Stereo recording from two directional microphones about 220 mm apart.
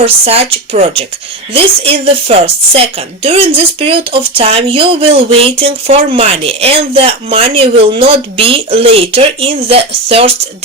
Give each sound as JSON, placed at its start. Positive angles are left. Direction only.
{"t": 0.0, "sound": "speech", "side_deg": -25}